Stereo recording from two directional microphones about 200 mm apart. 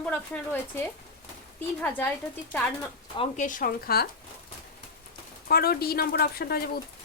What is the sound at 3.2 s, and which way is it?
Speech, 40° left (ahead or behind).